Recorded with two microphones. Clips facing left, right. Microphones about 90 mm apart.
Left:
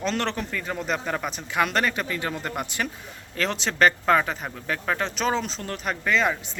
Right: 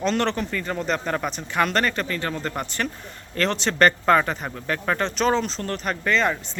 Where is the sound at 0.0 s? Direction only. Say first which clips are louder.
Right 4 dB; centre (ahead or behind).